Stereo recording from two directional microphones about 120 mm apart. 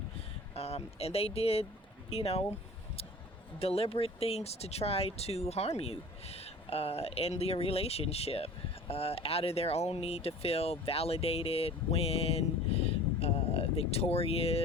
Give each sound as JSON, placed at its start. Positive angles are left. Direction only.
{"t": 0.5, "sound": "speech", "side_deg": 55}
{"t": 3.6, "sound": "speech", "side_deg": 55}